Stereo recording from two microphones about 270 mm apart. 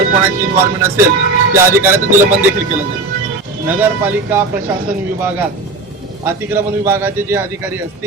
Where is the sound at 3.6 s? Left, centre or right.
Centre.